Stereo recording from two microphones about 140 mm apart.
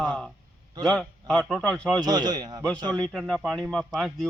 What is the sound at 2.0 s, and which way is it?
Speech, 30° right (ahead or behind).